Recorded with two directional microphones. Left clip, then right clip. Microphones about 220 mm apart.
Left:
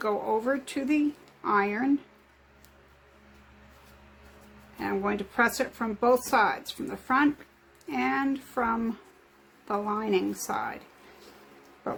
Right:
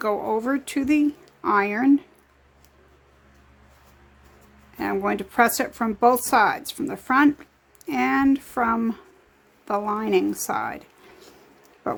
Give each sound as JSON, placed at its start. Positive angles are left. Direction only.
{"t": 0.0, "sound": "speech", "side_deg": -35}
{"t": 4.8, "sound": "speech", "side_deg": -40}